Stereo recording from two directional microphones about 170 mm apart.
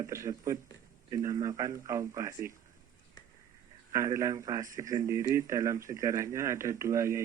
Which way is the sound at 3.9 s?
15° right (ahead or behind).